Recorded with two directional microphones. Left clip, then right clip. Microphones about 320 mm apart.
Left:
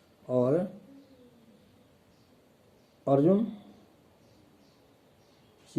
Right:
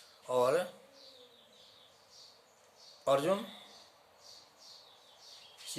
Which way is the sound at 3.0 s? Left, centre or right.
Centre.